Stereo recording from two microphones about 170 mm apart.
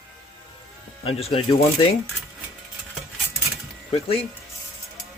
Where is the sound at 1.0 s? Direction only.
35° left (ahead or behind).